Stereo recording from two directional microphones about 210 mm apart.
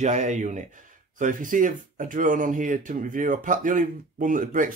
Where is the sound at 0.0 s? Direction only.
35° right (ahead or behind).